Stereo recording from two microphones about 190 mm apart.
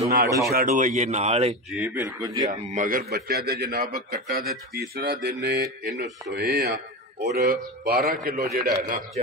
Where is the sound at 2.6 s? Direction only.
45° right (ahead or behind).